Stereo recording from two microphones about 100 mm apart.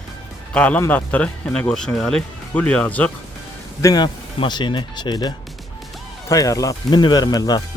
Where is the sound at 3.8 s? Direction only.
40° left (ahead or behind).